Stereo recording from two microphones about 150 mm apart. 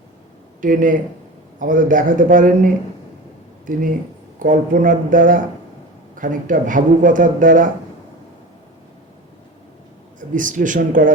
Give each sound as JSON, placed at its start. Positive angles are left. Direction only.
{"t": 0.6, "sound": "speech", "side_deg": -65}
{"t": 10.2, "sound": "speech", "side_deg": -60}